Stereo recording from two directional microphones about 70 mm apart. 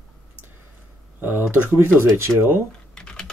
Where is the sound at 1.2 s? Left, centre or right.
Right.